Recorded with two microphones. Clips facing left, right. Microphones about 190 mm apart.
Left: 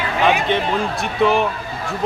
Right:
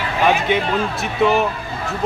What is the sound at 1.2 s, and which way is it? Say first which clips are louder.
Speech: even; centre (ahead or behind).